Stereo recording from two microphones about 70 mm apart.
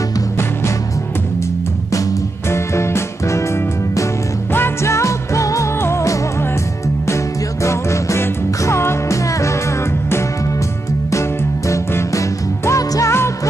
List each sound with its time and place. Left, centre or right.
2.5 s music: left
4.6 s music: left
7.6 s music: left
11.7 s music: left